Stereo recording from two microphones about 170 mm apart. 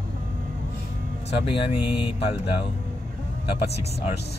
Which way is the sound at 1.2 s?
30° left (ahead or behind).